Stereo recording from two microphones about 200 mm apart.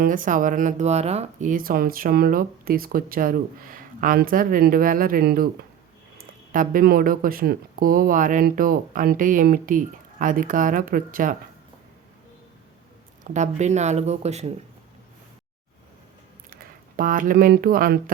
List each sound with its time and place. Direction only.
0.0 s speech: 40° right (ahead or behind)
6.5 s speech: 40° right (ahead or behind)
13.2 s speech: 35° right (ahead or behind)
16.5 s speech: 45° right (ahead or behind)